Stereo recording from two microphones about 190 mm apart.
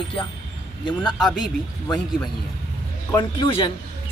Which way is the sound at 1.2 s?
Centre (ahead or behind).